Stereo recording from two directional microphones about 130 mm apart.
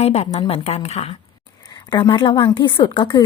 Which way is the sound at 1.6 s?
35° left (ahead or behind).